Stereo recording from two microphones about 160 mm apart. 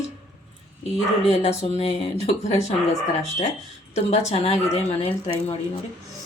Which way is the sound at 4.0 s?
45° left (ahead or behind).